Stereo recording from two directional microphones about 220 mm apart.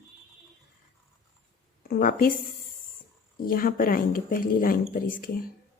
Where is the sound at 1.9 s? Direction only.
40° left (ahead or behind).